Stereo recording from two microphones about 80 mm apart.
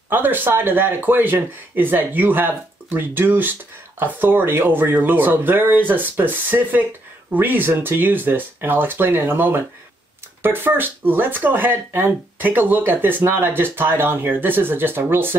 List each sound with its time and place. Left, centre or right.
0.1 s speech: right